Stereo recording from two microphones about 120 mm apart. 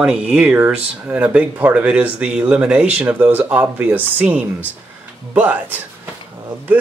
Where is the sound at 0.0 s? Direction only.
10° right (ahead or behind).